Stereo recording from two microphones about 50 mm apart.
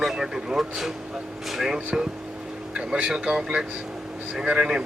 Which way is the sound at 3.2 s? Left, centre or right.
Centre.